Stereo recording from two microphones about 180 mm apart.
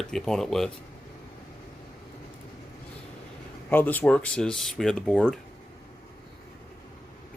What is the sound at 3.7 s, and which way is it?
Speech, 10° left (ahead or behind).